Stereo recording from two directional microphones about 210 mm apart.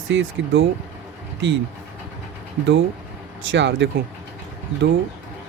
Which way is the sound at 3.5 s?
60° right (ahead or behind).